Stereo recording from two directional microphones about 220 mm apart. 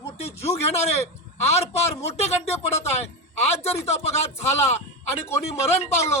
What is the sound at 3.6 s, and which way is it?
A man's voice, 30° left (ahead or behind).